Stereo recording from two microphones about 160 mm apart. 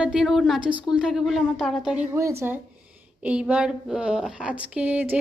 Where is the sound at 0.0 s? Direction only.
5° right (ahead or behind).